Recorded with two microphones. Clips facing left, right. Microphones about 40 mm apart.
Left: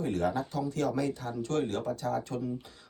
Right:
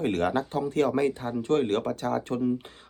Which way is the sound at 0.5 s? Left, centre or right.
Right.